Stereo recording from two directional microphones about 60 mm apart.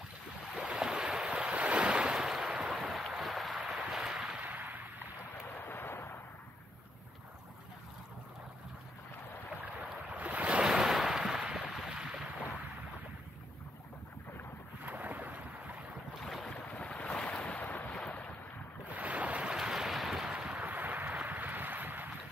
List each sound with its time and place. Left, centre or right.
0.6 s waves: centre
3.8 s a sound: centre
4.4 s a sound: right
5.6 s artillery fire: left
9.6 s boat: right
10.6 s a sound: centre
14.9 s boat: right
16.2 s boat: centre
16.5 s boat: left
18.9 s boat: right
19.5 s boat: centre
20.4 s a sound: right